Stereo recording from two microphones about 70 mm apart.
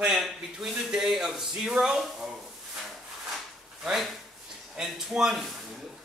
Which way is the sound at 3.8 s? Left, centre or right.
Centre.